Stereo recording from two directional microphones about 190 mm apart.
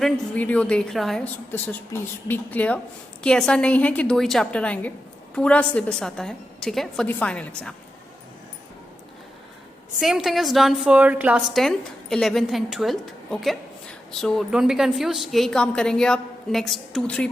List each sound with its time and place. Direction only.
0.0 s a woman's voice: 5° left (ahead or behind)
10.0 s a woman's voice: centre (ahead or behind)